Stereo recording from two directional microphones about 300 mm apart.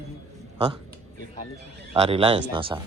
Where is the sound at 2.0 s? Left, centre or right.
Centre.